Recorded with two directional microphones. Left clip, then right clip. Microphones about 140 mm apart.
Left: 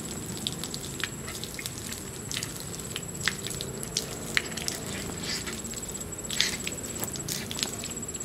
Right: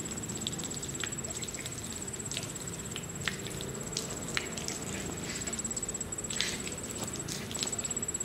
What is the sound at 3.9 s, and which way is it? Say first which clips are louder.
Squish: left 7 dB; 40° left (ahead or behind).